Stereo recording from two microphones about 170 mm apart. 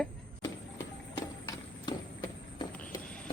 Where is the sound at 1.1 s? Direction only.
25° left (ahead or behind).